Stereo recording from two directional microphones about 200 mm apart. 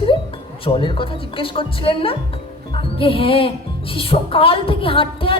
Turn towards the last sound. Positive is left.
turn(degrees=25)  # may be behind; listen again after turning